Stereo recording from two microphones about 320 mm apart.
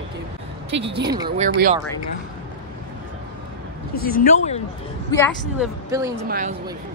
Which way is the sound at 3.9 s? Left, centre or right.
Left.